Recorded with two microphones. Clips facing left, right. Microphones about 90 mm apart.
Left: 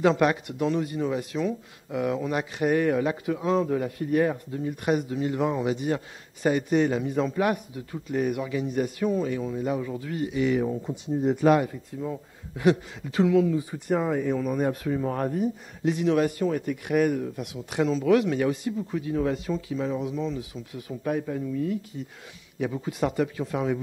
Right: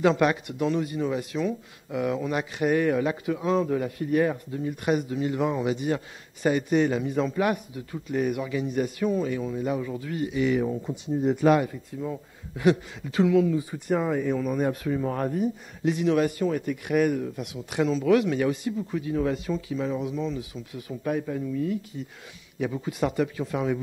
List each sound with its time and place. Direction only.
0.0 s speech: 35° left (ahead or behind)